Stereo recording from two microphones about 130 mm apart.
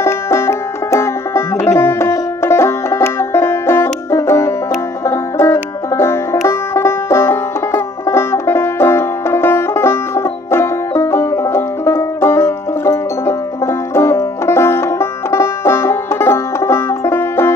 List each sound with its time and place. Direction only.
0.0 s music: 20° left (ahead or behind)
6.4 s banjo: 20° left (ahead or behind)